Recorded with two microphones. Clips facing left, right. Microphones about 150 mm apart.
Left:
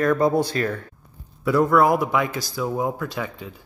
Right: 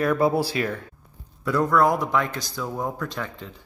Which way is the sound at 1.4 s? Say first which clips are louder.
Left 3 dB; 5° left (ahead or behind).